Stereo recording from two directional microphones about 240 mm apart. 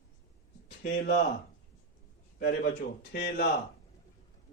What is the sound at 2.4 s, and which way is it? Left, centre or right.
Speech, left.